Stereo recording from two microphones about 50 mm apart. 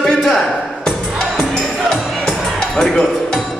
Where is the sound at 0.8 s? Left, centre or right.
Centre.